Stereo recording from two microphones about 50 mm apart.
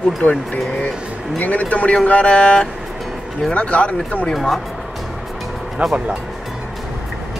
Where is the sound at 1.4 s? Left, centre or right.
Left.